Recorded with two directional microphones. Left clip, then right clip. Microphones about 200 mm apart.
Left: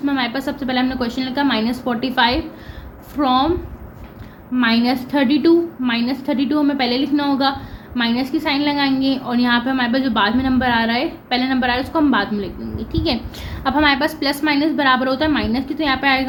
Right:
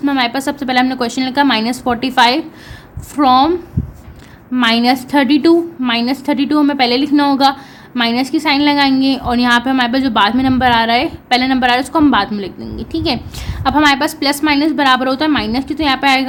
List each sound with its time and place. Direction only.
0.0 s a woman's voice: 40° right (ahead or behind)
4.5 s a woman's voice: 40° right (ahead or behind)